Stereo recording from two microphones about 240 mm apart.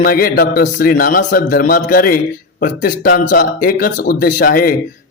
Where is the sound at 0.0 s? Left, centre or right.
Left.